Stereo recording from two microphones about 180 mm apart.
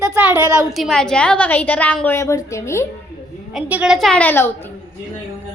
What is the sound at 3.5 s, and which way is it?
A woman's voice, 5° right (ahead or behind).